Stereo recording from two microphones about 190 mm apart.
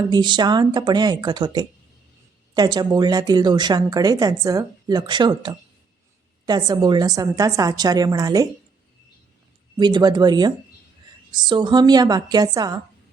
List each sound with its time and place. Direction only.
0.1 s speech: 25° right (ahead or behind)
9.7 s speech: 25° right (ahead or behind)